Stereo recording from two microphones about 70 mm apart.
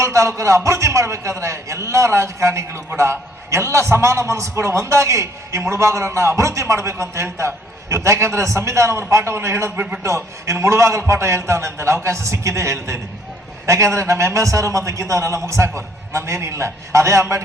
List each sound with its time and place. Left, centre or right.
0.0 s a man's voice: right